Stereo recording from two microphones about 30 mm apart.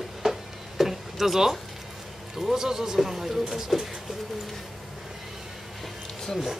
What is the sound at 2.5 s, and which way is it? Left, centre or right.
Speech, centre.